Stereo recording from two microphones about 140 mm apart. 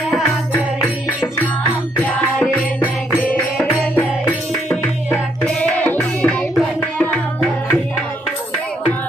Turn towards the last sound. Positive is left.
turn(degrees=10)  # may be behind; listen again after turning